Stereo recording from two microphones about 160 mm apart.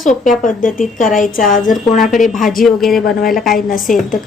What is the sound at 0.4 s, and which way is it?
Speech, 55° left (ahead or behind).